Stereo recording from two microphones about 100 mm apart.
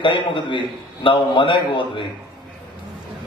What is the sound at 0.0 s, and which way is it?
A man's voice, 50° left (ahead or behind).